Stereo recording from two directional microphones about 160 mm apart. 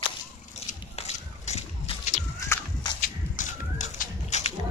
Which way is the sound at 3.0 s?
50° left (ahead or behind).